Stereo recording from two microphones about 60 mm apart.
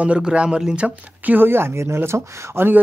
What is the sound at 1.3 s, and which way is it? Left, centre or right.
Speech, right.